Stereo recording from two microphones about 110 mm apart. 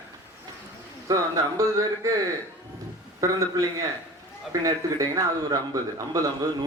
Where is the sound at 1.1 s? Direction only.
30° right (ahead or behind).